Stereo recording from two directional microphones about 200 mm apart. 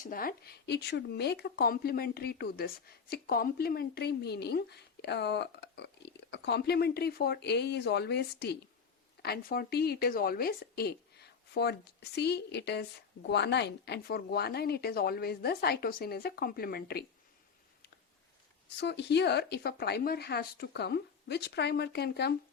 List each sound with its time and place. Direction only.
0.0 s speech: 45° left (ahead or behind)
18.8 s a woman's voice: 60° left (ahead or behind)